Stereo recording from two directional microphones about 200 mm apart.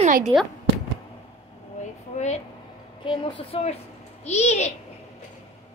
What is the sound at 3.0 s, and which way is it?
A woman's voice, 25° left (ahead or behind).